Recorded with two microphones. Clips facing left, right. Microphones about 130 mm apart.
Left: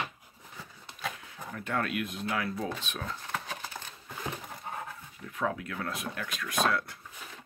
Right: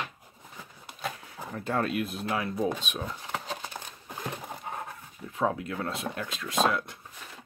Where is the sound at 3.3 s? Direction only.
20° right (ahead or behind).